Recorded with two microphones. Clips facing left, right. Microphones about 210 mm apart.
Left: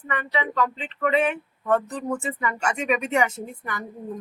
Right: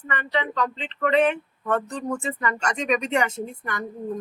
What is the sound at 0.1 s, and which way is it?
Speech, 5° left (ahead or behind).